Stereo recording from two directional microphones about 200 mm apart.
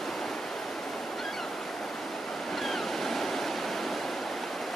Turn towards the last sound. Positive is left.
turn(degrees=0)  # may be behind; listen again after turning